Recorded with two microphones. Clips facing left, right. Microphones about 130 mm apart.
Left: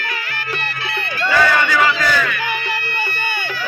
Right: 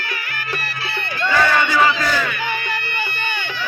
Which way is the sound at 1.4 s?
20° right (ahead or behind).